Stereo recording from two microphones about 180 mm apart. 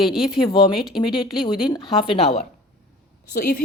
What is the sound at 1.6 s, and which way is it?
Speech, 25° left (ahead or behind).